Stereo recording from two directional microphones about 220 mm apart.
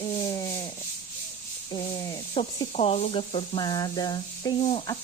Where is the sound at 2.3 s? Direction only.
25° left (ahead or behind).